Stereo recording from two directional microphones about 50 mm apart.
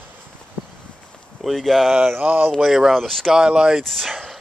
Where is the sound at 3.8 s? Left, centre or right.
Centre.